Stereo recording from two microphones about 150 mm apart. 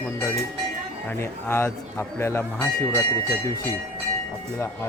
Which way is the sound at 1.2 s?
15° left (ahead or behind).